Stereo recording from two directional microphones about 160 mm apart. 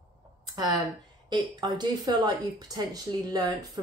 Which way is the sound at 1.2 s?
25° right (ahead or behind).